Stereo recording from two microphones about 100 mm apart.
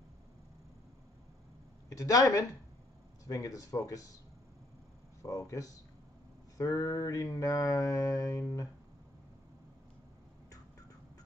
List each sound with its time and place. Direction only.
1.9 s mantra: 35° left (ahead or behind)
5.2 s mantra: 30° left (ahead or behind)